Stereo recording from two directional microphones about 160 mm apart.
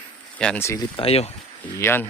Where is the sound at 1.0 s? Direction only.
40° left (ahead or behind).